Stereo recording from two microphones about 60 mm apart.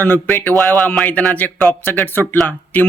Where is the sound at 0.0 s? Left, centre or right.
Left.